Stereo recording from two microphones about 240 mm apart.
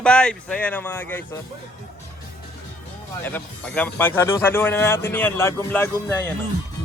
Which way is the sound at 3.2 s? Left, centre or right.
Centre.